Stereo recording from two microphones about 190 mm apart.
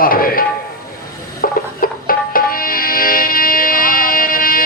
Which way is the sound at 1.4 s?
50° left (ahead or behind).